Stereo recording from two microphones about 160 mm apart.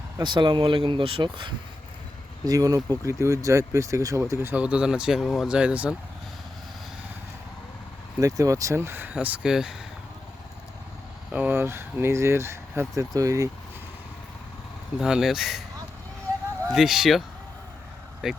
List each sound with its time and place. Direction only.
0.2 s speech: 30° right (ahead or behind); by 6.0 s 10° right (ahead or behind)
8.2 s speech: 20° right (ahead or behind); by 9.7 s 5° right (ahead or behind)
11.3 s speech: 10° right (ahead or behind)
14.9 s speech: 5° right (ahead or behind)
16.7 s speech: centre (ahead or behind)